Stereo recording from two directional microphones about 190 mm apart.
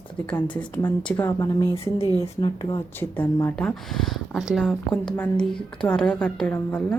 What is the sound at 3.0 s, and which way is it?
Speech, 10° left (ahead or behind).